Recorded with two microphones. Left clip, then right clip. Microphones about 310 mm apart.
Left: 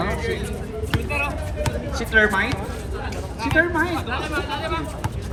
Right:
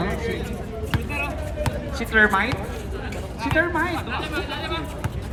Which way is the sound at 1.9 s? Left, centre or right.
Centre.